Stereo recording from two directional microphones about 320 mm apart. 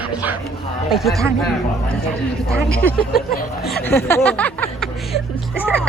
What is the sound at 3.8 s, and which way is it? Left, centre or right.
Speech, centre.